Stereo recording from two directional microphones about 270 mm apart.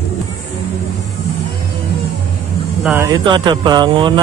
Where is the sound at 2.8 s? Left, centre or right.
Centre.